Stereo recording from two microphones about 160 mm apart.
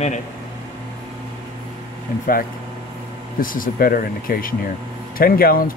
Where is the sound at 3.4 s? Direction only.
60° left (ahead or behind).